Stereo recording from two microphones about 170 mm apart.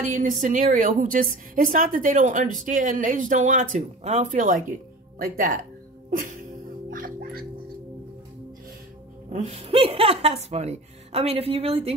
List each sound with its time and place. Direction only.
0.1 s a woman's voice: 50° right (ahead or behind)
6.0 s music: 45° right (ahead or behind)
9.3 s a woman's voice: 40° right (ahead or behind)